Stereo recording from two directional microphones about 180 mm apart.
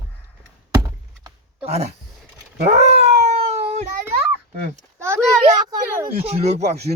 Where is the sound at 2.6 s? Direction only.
40° right (ahead or behind).